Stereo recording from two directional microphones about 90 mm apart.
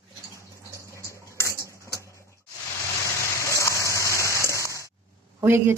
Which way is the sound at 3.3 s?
35° left (ahead or behind).